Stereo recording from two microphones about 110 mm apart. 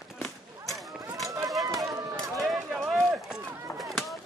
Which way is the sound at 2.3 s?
5° right (ahead or behind).